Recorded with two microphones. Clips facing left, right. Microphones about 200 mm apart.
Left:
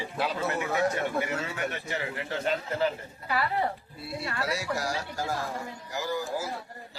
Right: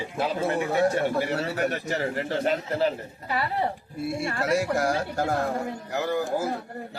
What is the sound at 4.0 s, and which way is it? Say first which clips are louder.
A man's voice: right 6 dB; 50° right (ahead or behind).